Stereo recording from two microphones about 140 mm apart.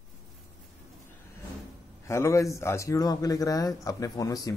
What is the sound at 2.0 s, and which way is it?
A man's voice, 20° left (ahead or behind).